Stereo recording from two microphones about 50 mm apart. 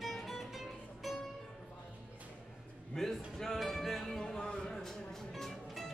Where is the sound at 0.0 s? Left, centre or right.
Centre.